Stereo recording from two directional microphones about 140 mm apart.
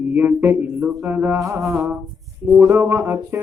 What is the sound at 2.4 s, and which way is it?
Music, 20° right (ahead or behind).